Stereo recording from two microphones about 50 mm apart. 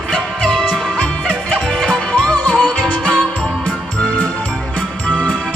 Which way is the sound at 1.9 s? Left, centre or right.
Left.